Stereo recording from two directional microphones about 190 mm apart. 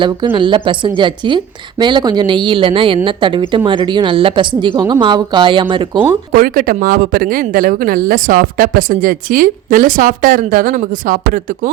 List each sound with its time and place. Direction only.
0.0 s a woman's voice: 25° right (ahead or behind)
6.3 s speech: 50° right (ahead or behind)